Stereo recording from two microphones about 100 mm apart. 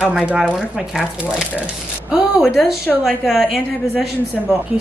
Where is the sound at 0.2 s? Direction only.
10° right (ahead or behind).